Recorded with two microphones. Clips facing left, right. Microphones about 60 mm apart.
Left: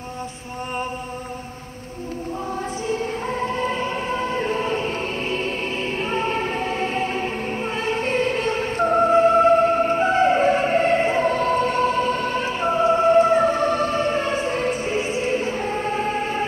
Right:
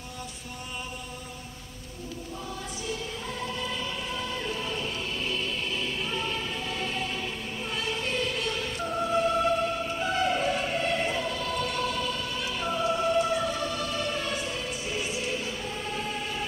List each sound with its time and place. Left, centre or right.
2.9 s choir: left
6.0 s music: left